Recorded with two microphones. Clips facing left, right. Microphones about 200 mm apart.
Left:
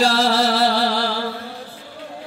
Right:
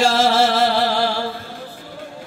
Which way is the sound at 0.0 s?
35° left (ahead or behind).